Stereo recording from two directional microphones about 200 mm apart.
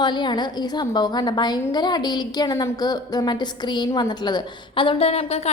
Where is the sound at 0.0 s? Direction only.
20° left (ahead or behind).